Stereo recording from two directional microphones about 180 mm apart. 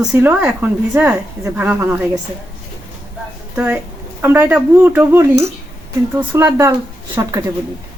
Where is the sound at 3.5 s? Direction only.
10° right (ahead or behind).